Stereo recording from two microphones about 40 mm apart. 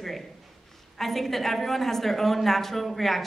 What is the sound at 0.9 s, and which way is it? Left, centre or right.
A woman's voice, centre.